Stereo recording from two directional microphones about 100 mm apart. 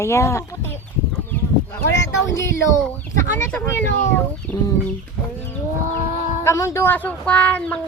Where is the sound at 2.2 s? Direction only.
30° left (ahead or behind).